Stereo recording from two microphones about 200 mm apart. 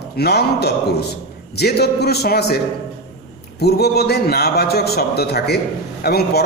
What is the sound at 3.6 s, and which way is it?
A man's voice, 55° left (ahead or behind).